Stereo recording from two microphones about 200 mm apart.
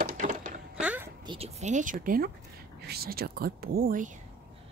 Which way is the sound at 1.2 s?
30° right (ahead or behind).